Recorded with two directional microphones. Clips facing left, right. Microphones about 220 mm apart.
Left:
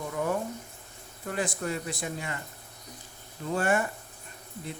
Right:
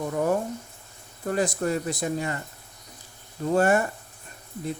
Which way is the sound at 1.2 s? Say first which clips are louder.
Right 6 dB; 40° right (ahead or behind).